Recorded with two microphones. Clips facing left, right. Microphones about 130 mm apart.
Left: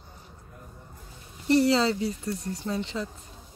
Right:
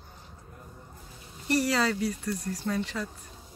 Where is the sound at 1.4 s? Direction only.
25° left (ahead or behind).